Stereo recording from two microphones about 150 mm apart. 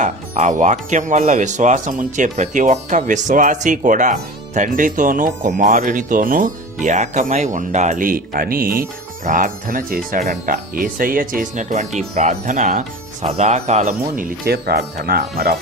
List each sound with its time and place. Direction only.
0.0 s speech: 55° right (ahead or behind)
13.2 s speech: 45° right (ahead or behind); by 15.5 s 85° right